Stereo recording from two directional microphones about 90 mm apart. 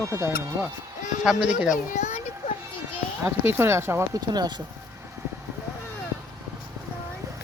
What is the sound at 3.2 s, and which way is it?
Speech, 25° right (ahead or behind).